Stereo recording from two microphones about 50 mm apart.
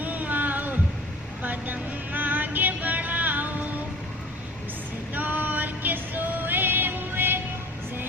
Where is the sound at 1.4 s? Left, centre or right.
Right.